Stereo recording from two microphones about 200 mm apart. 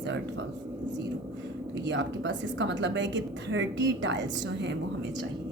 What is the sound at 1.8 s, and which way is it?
A woman's voice, 60° right (ahead or behind).